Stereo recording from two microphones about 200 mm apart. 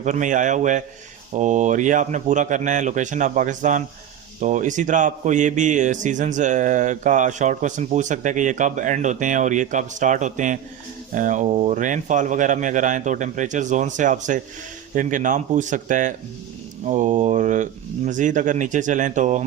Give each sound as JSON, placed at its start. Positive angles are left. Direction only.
{"t": 0.0, "sound": "a man's voice", "side_deg": -40}